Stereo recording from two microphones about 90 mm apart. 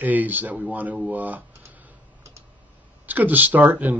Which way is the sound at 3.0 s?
20° right (ahead or behind).